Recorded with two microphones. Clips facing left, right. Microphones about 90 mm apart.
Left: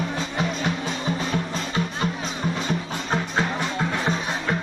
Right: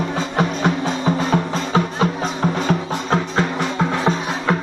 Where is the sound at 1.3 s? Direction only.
90° right.